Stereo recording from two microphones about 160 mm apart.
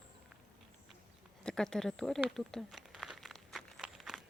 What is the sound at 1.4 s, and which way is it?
Speech, 5° left (ahead or behind).